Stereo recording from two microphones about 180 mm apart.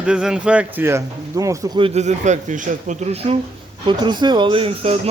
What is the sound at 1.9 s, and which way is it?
Speech, 40° right (ahead or behind).